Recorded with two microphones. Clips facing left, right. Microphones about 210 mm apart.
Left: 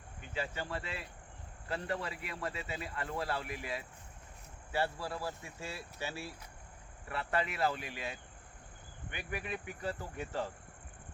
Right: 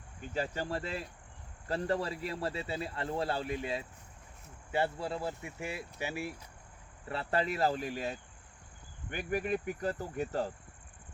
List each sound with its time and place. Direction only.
0.2 s speech: 40° right (ahead or behind); by 6.3 s 15° right (ahead or behind)
7.1 s speech: 30° right (ahead or behind)